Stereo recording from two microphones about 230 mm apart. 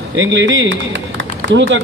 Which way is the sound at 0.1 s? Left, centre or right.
Right.